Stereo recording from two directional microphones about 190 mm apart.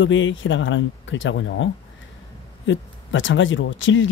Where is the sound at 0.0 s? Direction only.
80° left.